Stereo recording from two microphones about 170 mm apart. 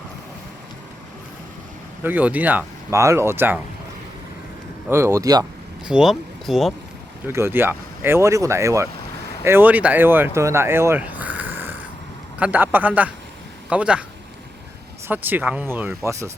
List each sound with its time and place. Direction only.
2.0 s speech: 10° right (ahead or behind)
4.9 s speech: 15° right (ahead or behind)
5.8 s speech: 5° right (ahead or behind)
7.3 s a man's voice: 15° right (ahead or behind)
15.0 s speech: 10° right (ahead or behind)